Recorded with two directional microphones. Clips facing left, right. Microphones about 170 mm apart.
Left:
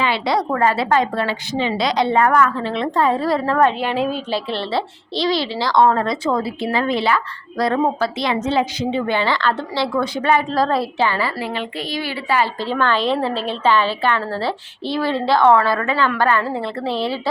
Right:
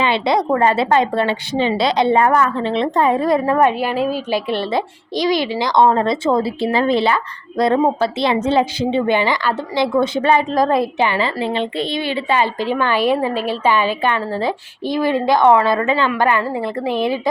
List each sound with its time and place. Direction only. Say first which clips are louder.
0.0 s a woman's voice: right 3 dB; 20° right (ahead or behind)